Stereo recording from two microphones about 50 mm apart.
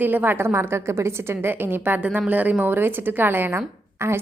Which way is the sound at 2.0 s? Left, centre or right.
Right.